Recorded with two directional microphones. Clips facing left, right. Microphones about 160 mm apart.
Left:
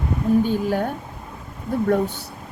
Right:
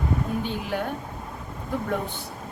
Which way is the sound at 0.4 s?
45° left (ahead or behind).